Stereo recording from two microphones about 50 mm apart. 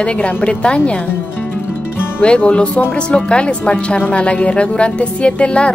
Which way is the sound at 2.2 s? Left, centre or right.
Left.